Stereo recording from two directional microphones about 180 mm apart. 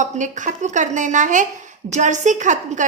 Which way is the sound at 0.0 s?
45° right (ahead or behind).